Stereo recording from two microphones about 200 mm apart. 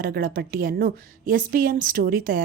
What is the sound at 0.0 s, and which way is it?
A woman's voice, 50° right (ahead or behind).